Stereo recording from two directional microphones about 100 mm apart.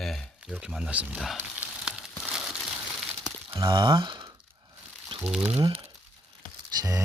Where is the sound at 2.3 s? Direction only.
5° right (ahead or behind).